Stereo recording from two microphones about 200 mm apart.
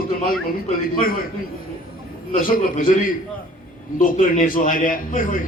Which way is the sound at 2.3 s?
45° left (ahead or behind).